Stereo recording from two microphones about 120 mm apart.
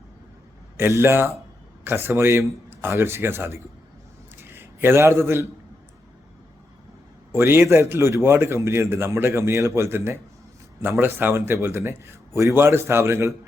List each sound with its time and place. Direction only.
0.8 s a man's voice: 20° right (ahead or behind)
7.3 s a man's voice: 20° right (ahead or behind)